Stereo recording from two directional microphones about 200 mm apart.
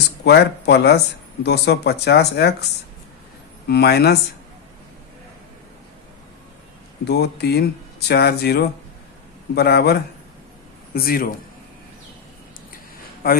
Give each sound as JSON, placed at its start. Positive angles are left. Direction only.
{"t": 0.3, "sound": "speech", "side_deg": 55}
{"t": 3.7, "sound": "speech", "side_deg": 55}
{"t": 7.0, "sound": "speech", "side_deg": 55}
{"t": 13.2, "sound": "speech", "side_deg": 45}